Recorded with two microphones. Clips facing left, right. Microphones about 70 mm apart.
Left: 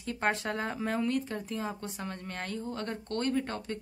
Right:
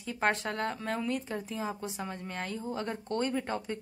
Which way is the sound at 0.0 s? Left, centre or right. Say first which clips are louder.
Right 1 dB; centre.